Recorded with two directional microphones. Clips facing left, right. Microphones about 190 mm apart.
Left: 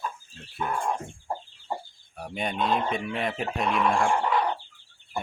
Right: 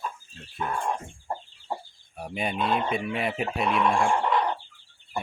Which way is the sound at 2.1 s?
5° right (ahead or behind).